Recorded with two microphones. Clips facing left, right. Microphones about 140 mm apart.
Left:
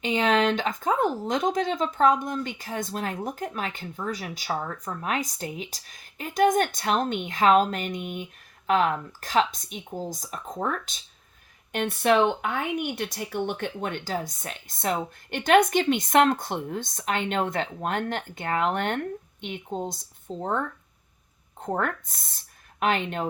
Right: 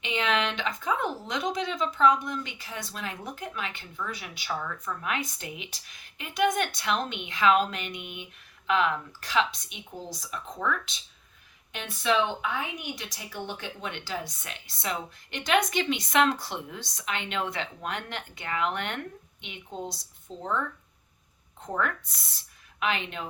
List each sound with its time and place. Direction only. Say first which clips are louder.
0.0 s speech: left 6 dB; 40° left (ahead or behind)